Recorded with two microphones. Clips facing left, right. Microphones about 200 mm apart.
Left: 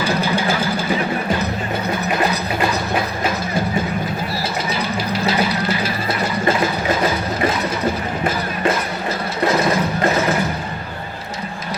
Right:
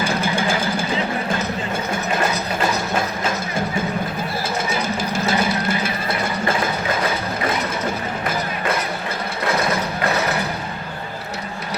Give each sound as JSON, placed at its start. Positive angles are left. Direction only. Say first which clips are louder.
{"t": 0.0, "sound": "vehicle", "louder": "left 2 dB", "side_deg": -50}
{"t": 4.7, "sound": "music", "louder": "left 1 dB", "side_deg": -50}